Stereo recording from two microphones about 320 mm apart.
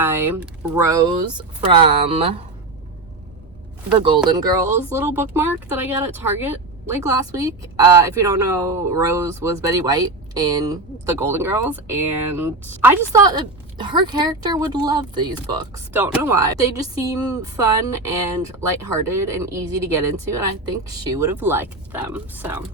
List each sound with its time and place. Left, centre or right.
0.0 s speech: centre
1.7 s speech: centre
4.3 s speech: centre